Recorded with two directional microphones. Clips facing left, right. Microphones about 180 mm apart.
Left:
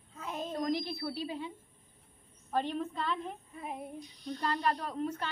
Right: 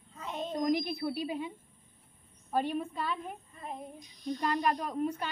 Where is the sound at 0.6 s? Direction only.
15° right (ahead or behind).